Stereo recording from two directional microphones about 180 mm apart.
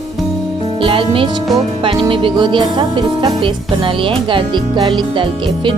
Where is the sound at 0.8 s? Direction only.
30° right (ahead or behind).